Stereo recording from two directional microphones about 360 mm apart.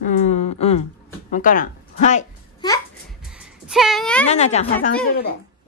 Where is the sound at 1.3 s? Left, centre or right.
Left.